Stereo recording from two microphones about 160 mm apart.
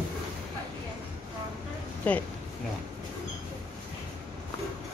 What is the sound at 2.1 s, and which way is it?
Speech, 10° left (ahead or behind).